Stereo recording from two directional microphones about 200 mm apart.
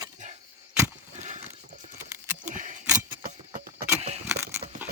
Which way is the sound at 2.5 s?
40° right (ahead or behind).